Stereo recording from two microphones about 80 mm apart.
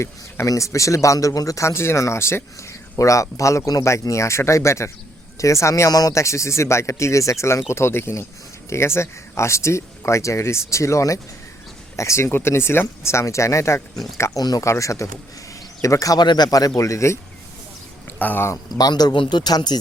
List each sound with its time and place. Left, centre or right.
0.0 s speech: left
16.2 s speech: left
16.5 s speech: left
18.2 s speech: left
18.5 s speech: left